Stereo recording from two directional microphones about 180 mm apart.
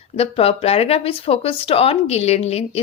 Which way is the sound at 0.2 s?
35° left (ahead or behind).